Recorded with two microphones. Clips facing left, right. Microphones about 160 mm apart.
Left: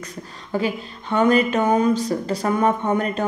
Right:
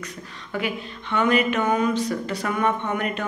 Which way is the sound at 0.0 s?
35° left (ahead or behind).